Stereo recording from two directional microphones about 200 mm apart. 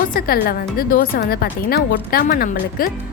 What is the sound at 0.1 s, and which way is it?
Speech, 45° left (ahead or behind).